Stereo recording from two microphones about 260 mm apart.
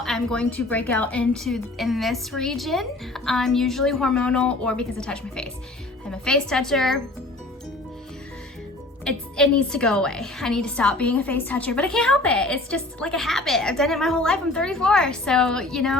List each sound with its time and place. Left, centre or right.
0.0 s a woman's voice: centre
9.0 s a woman's voice: centre